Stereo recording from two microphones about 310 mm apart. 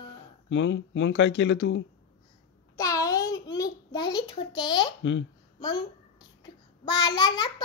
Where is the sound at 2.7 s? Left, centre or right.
Centre.